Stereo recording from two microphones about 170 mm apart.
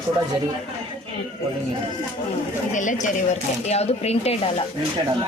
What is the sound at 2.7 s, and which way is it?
Speech, 50° left (ahead or behind).